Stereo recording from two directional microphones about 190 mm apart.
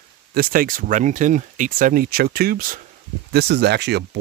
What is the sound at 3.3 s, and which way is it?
Speech, 60° right (ahead or behind).